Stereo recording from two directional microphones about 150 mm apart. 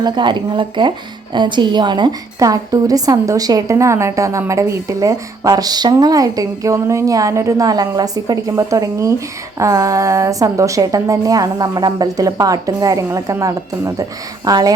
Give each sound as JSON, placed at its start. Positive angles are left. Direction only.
{"t": 0.0, "sound": "a woman's voice", "side_deg": -30}